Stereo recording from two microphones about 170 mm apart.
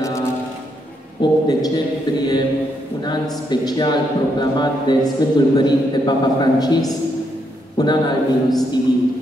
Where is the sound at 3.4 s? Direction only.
25° left (ahead or behind).